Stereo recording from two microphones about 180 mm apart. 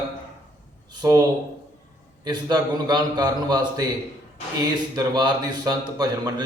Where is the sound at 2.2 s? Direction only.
25° right (ahead or behind).